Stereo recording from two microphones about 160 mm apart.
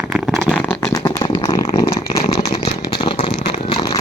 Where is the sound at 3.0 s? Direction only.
35° left (ahead or behind).